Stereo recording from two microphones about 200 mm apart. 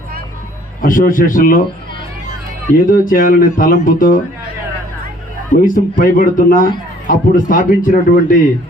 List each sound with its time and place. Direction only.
0.8 s speech: 45° left (ahead or behind)
2.8 s speech: 45° left (ahead or behind)
5.5 s speech: 45° left (ahead or behind)